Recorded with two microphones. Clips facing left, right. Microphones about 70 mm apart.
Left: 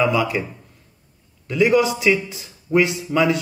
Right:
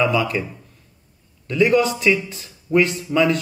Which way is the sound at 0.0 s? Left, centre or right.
Centre.